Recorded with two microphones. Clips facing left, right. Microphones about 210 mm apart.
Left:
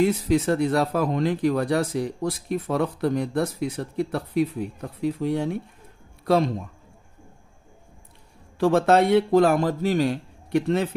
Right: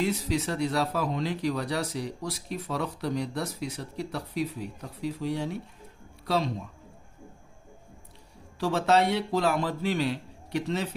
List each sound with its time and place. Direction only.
0.0 s speech: 50° left (ahead or behind)
8.5 s speech: 55° left (ahead or behind)